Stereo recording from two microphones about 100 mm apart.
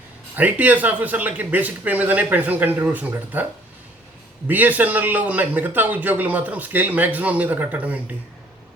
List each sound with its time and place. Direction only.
0.3 s a man's voice: 15° right (ahead or behind)
4.4 s a man's voice: 15° right (ahead or behind)